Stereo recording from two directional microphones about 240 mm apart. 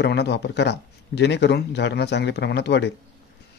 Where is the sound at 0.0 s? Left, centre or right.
Left.